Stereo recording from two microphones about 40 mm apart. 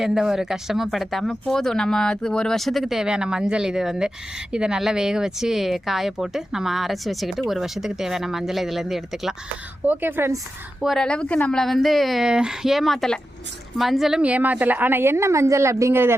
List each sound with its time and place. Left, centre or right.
0.0 s speech: centre
0.9 s speech: centre
2.6 s a woman's voice: centre
3.1 s speech: centre
9.8 s a woman's voice: right
10.9 s a woman's voice: left
11.5 s a woman's voice: centre
12.2 s speech: centre
12.6 s a woman's voice: centre
14.2 s a woman's voice: right
14.5 s a woman's voice: right